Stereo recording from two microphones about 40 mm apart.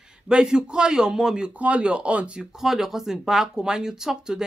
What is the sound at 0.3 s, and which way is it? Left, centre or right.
A man's voice, centre.